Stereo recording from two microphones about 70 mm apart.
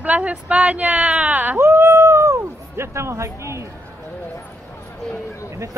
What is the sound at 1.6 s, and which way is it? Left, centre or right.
Speech, right.